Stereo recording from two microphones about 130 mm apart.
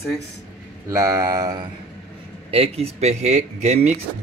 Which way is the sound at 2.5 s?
50° right (ahead or behind).